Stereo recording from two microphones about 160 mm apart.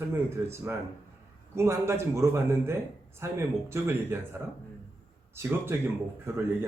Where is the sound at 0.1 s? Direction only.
15° right (ahead or behind).